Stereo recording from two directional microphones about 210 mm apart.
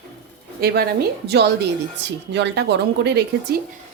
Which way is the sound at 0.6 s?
50° right (ahead or behind).